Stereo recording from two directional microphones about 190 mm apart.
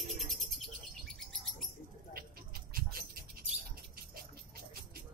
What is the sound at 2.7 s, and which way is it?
Dog, 50° right (ahead or behind).